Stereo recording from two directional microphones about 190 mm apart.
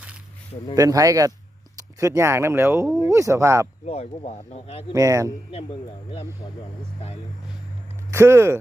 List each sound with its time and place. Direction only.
0.8 s speech: 15° right (ahead or behind)
3.8 s speech: 35° left (ahead or behind)
4.9 s speech: 15° right (ahead or behind)
8.1 s speech: 15° right (ahead or behind)